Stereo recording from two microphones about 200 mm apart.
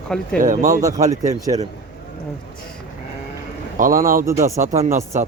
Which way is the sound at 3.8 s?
45° right (ahead or behind).